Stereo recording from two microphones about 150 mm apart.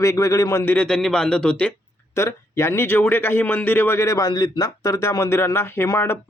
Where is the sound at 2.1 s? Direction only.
20° left (ahead or behind).